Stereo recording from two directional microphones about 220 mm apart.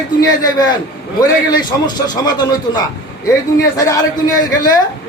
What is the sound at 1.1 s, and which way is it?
A man's voice, 20° left (ahead or behind).